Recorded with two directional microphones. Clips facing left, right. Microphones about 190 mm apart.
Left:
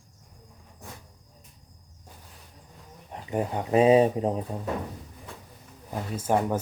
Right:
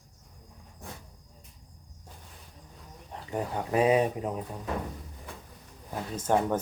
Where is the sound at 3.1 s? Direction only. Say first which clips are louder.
Left 4 dB; 20° left (ahead or behind).